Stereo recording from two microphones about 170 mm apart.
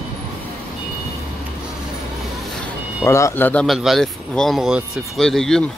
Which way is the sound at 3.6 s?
Centre (ahead or behind).